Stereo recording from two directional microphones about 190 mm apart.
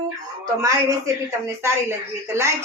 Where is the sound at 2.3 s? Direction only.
15° right (ahead or behind).